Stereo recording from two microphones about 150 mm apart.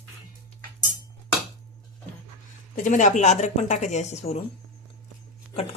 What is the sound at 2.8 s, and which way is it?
Speech, 55° left (ahead or behind).